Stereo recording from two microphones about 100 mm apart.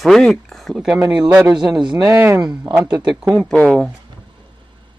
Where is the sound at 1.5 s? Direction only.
50° right (ahead or behind).